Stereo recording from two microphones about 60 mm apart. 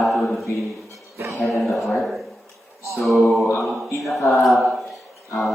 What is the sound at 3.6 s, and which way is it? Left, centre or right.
Speech, centre.